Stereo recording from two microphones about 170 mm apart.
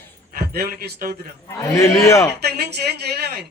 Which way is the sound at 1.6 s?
15° left (ahead or behind).